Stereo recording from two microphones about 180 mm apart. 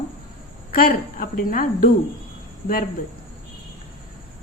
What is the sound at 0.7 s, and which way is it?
A woman's voice, 55° left (ahead or behind).